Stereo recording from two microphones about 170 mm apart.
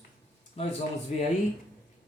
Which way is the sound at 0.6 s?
35° left (ahead or behind).